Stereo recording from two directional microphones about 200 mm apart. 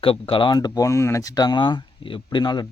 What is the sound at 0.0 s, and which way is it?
Speech, 25° left (ahead or behind).